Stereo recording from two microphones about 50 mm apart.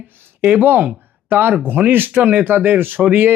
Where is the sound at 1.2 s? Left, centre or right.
Right.